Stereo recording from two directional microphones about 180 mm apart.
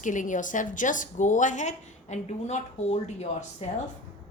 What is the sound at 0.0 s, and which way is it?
A woman's voice, 45° left (ahead or behind).